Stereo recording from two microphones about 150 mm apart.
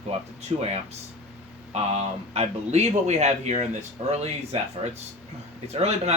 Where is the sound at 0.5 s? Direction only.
40° right (ahead or behind).